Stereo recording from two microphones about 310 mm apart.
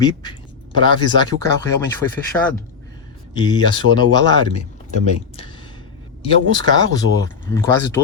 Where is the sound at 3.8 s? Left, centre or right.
Right.